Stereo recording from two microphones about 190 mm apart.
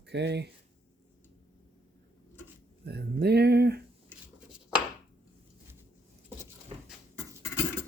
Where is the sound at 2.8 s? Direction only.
60° right (ahead or behind).